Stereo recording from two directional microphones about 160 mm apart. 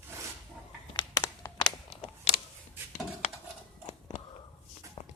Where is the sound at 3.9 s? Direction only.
40° left (ahead or behind).